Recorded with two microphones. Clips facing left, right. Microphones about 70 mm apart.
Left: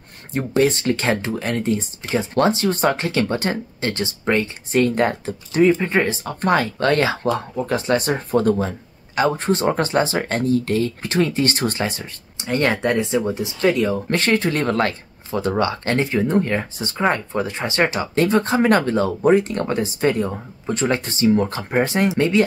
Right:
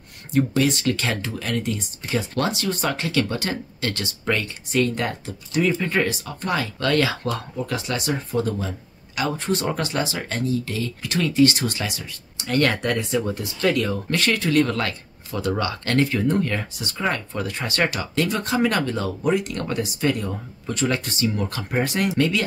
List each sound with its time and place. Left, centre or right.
0.3 s speech: left
6.2 s speech: left
8.1 s speech: left
12.4 s speech: left
14.0 s speech: left